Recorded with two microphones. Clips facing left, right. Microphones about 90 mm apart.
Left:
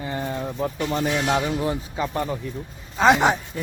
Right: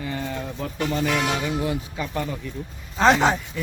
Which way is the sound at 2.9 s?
10° left (ahead or behind).